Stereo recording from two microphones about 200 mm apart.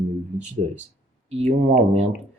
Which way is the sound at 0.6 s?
30° right (ahead or behind).